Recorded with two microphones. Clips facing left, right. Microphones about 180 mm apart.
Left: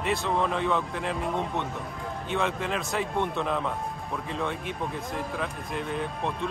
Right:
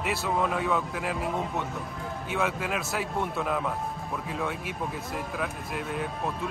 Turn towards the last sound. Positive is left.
turn(degrees=-5)  # may be behind; listen again after turning